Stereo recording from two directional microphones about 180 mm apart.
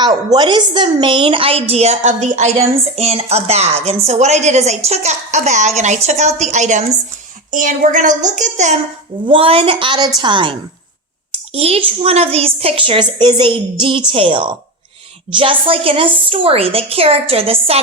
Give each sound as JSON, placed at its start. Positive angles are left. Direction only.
{"t": 0.0, "sound": "a woman's voice", "side_deg": -25}
{"t": 9.2, "sound": "a woman's voice", "side_deg": -30}